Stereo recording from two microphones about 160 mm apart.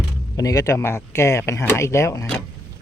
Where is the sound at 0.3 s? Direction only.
20° left (ahead or behind).